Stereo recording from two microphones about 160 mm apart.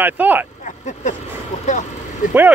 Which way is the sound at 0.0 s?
10° right (ahead or behind).